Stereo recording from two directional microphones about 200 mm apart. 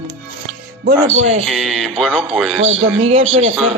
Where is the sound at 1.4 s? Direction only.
Centre (ahead or behind).